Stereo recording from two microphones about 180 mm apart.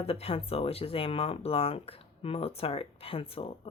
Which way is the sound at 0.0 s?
35° left (ahead or behind).